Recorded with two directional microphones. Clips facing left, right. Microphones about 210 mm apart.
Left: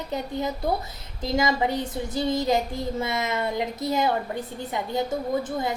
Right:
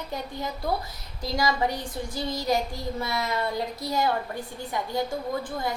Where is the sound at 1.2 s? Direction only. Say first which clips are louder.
Left 2 dB; 20° left (ahead or behind).